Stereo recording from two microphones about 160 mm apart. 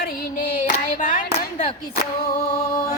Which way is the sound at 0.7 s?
50° left (ahead or behind).